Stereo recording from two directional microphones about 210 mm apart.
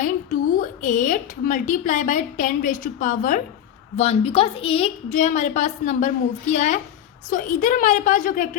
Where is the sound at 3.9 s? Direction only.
30° left (ahead or behind).